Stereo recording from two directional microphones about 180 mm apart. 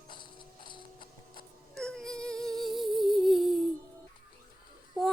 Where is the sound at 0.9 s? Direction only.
50° left (ahead or behind).